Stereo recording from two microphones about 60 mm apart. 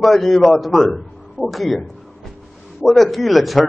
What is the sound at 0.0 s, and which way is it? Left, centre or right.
A man's voice, centre.